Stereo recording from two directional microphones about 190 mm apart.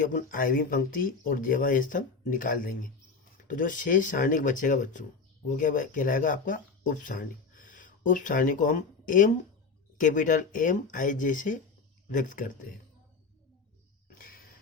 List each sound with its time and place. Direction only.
0.0 s speech: 45° left (ahead or behind)